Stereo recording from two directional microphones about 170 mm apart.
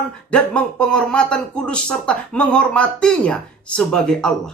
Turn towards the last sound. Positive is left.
turn(degrees=5)  # may be behind; listen again after turning